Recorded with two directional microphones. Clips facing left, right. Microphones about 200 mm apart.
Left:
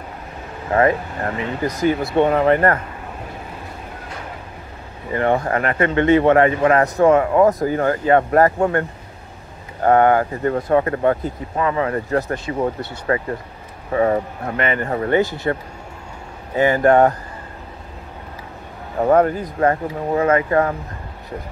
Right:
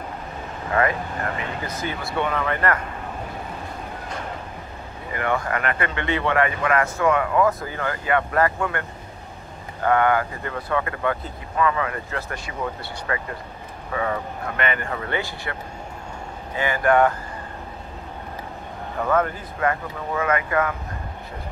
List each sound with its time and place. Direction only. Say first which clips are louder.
0.7 s speech: left 6 dB; 30° left (ahead or behind)
5.1 s speech: left 6 dB; 30° left (ahead or behind)
9.8 s speech: left 6 dB; 40° left (ahead or behind)
18.9 s speech: left 7 dB; 35° left (ahead or behind)